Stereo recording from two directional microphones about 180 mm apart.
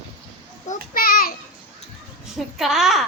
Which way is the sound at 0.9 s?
55° left (ahead or behind).